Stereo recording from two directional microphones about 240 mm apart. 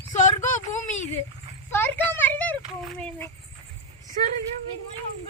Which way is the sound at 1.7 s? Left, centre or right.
Centre.